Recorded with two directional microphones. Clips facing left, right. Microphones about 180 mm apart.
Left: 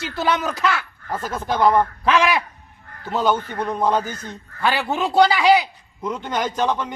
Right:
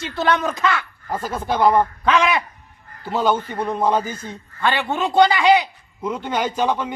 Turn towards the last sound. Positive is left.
turn(degrees=-10)  # may be behind; listen again after turning